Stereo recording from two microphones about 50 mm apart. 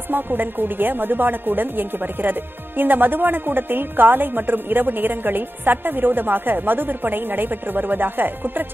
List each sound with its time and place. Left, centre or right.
0.1 s a woman's voice: right